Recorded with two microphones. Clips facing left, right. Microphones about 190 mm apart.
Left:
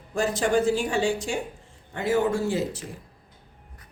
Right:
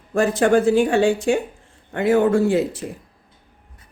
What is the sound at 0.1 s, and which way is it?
Speech, 55° right (ahead or behind).